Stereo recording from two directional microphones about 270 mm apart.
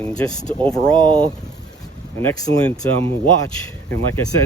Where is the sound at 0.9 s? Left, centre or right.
Centre.